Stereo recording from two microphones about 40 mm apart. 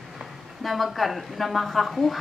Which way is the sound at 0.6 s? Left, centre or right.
Centre.